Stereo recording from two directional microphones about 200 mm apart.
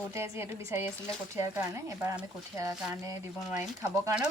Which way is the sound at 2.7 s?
5° right (ahead or behind).